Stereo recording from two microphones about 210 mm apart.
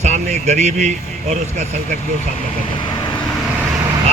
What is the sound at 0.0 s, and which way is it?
Speech, 30° right (ahead or behind).